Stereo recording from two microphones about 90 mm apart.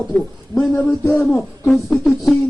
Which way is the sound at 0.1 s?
15° left (ahead or behind).